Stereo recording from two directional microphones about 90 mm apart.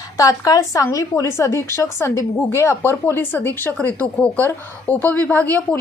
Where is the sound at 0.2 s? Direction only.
40° left (ahead or behind).